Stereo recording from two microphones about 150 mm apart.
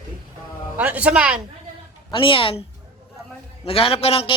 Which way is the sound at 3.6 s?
40° left (ahead or behind).